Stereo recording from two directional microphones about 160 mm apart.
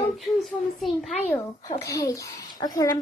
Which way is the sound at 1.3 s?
20° left (ahead or behind).